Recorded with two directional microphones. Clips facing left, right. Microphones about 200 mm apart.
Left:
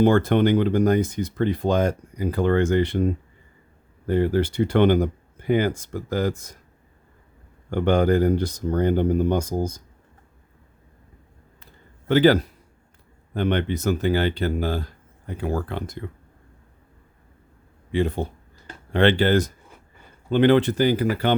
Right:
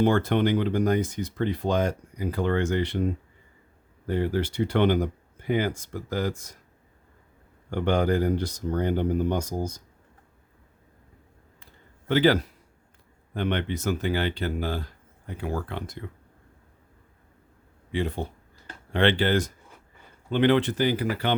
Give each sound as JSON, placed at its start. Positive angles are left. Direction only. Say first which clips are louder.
{"t": 0.0, "sound": "speech", "louder": "left 4 dB", "side_deg": 50}
{"t": 4.0, "sound": "speech", "louder": "left 5 dB", "side_deg": 50}
{"t": 7.7, "sound": "speech", "louder": "left 4 dB", "side_deg": 50}
{"t": 11.6, "sound": "a sound", "louder": "left 3 dB", "side_deg": 45}
{"t": 13.3, "sound": "speech", "louder": "left 5 dB", "side_deg": 45}
{"t": 18.2, "sound": "speech", "louder": "left 4 dB", "side_deg": 45}